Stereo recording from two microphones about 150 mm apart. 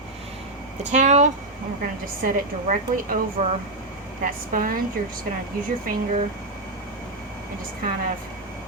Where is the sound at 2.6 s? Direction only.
55° right (ahead or behind).